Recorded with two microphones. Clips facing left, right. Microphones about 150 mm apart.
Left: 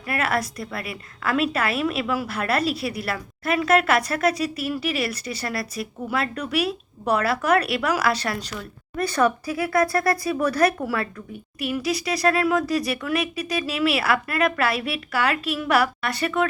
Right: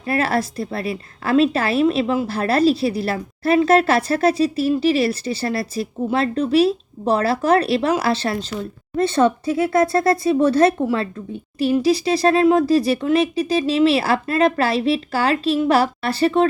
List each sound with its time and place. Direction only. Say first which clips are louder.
0.0 s a woman's voice: right 5 dB; 30° right (ahead or behind)